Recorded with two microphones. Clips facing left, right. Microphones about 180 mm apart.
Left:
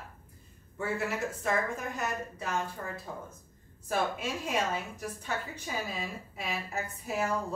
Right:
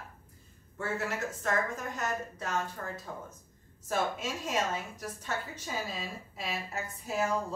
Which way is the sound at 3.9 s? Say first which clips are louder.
Left 1 dB; 10° left (ahead or behind).